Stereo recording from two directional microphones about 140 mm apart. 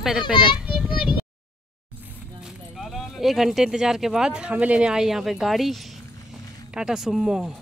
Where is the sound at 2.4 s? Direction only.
Centre (ahead or behind).